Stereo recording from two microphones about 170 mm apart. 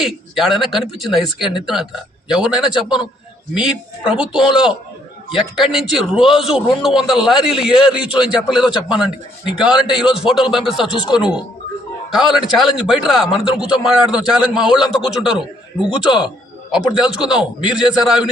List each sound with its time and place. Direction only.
0.0 s a man's voice: centre (ahead or behind)